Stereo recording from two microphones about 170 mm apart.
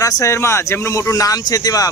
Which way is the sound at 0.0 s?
20° left (ahead or behind).